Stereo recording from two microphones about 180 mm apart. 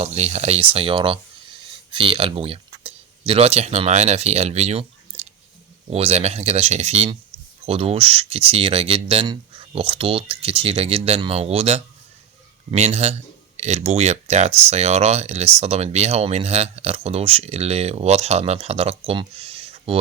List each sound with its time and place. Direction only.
0.0 s speech: 35° right (ahead or behind)